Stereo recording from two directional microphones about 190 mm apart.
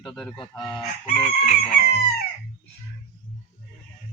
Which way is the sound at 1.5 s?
35° left (ahead or behind).